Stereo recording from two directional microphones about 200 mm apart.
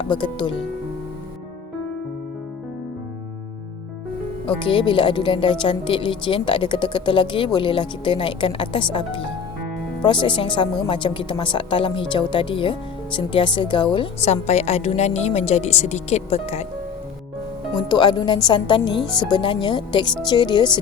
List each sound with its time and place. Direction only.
0.0 s a woman's voice: 25° left (ahead or behind)
4.4 s a woman's voice: 25° left (ahead or behind)
17.7 s a woman's voice: 20° left (ahead or behind)